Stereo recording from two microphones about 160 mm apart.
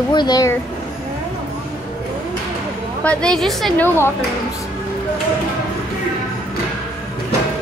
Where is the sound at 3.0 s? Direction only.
5° left (ahead or behind).